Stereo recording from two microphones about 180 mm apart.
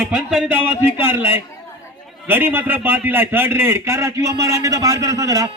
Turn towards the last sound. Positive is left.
turn(degrees=-20)  # may be behind; listen again after turning